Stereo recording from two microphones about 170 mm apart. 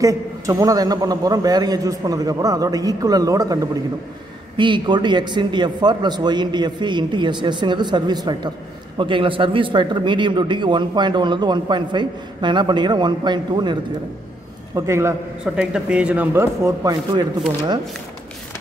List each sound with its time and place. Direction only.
0.0 s a man's voice: 20° right (ahead or behind)
14.9 s speech: 15° right (ahead or behind)
15.4 s a man's voice: 5° right (ahead or behind); by 17.7 s 25° right (ahead or behind)